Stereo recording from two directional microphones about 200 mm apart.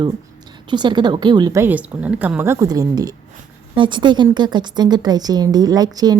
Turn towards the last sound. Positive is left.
turn(degrees=-20)  # may be behind; listen again after turning